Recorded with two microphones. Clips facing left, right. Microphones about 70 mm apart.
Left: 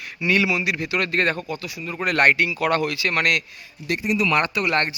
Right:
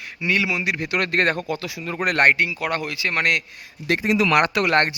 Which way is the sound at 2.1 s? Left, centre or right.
Right.